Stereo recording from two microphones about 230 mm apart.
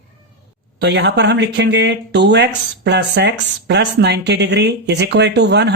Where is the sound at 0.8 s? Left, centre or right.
Right.